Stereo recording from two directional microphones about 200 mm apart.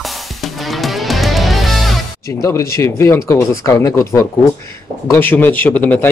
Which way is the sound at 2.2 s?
15° left (ahead or behind).